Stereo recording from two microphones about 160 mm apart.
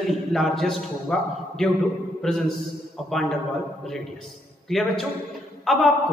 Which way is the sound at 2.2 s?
Centre (ahead or behind).